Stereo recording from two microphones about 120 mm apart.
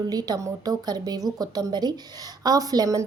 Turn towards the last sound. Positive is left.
turn(degrees=-30)  # may be behind; listen again after turning